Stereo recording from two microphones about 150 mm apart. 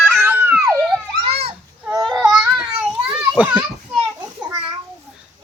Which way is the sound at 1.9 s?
25° right (ahead or behind).